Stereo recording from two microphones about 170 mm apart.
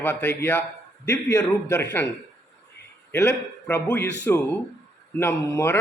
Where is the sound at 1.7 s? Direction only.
10° left (ahead or behind).